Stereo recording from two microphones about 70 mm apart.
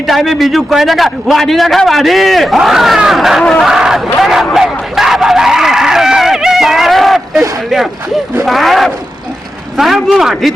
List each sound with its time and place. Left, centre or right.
0.1 s a man's voice: centre
4.5 s a sound: centre
8.4 s a man's voice: centre